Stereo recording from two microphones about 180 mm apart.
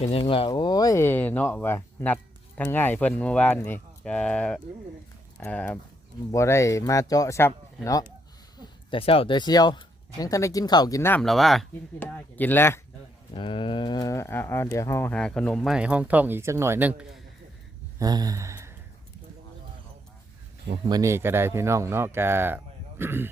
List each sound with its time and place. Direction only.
0.0 s speech: 35° left (ahead or behind); by 7.5 s 15° left (ahead or behind)
8.6 s speech: 30° left (ahead or behind)
11.2 s speech: centre (ahead or behind)
13.3 s speech: 30° left (ahead or behind); by 17.2 s 5° right (ahead or behind)
18.0 s gasp: 20° right (ahead or behind)
20.8 s speech: 20° right (ahead or behind)